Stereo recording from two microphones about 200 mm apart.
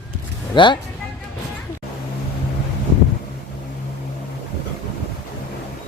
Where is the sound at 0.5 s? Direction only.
25° left (ahead or behind).